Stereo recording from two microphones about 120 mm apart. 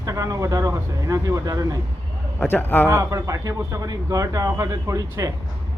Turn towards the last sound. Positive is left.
turn(degrees=-25)  # may be behind; listen again after turning